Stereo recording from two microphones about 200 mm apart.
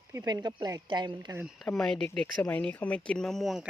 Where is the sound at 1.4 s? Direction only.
Centre (ahead or behind).